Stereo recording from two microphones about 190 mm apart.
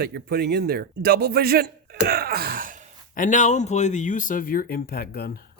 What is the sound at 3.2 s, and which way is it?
Speech, 40° left (ahead or behind).